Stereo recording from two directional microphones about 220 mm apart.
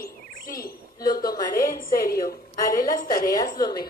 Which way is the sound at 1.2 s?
15° left (ahead or behind).